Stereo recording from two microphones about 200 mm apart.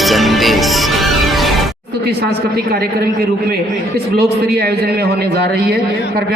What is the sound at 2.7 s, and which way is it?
Speech, 55° right (ahead or behind).